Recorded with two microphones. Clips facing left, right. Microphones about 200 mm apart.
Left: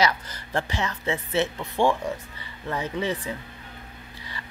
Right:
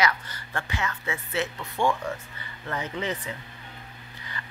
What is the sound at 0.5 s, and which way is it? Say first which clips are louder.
Speech: left 4 dB; 25° left (ahead or behind).